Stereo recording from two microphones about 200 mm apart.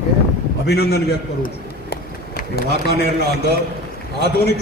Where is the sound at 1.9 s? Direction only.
50° left (ahead or behind).